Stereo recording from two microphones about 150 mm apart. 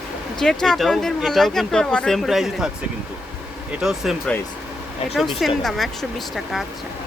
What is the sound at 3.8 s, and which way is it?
Speech, 5° right (ahead or behind).